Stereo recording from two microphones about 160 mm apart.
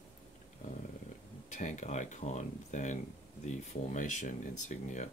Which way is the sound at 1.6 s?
50° left (ahead or behind).